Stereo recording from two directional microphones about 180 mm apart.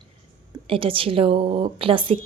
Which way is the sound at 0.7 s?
30° right (ahead or behind).